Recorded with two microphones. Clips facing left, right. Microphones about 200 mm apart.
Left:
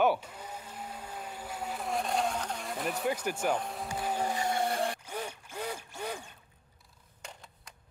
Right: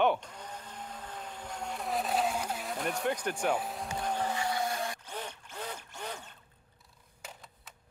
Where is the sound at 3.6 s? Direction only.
Centre (ahead or behind).